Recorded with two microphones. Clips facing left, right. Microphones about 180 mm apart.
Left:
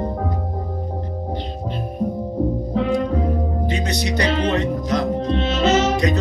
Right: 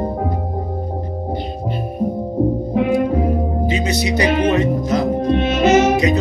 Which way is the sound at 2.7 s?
10° right (ahead or behind).